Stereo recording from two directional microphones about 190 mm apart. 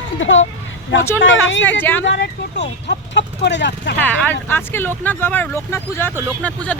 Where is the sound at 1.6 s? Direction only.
10° left (ahead or behind).